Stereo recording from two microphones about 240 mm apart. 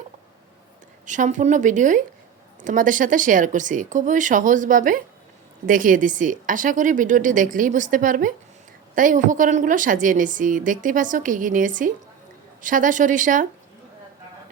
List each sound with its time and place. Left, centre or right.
1.0 s a woman's voice: right